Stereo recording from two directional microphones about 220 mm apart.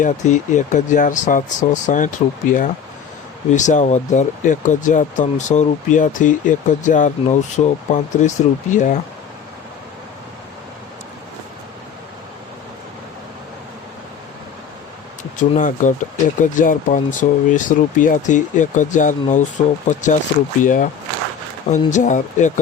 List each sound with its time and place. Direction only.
0.0 s speech: 30° left (ahead or behind)
15.4 s speech: 35° left (ahead or behind)